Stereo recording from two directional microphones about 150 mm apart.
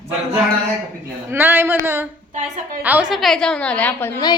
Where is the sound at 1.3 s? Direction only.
15° right (ahead or behind); by 4.1 s 10° left (ahead or behind).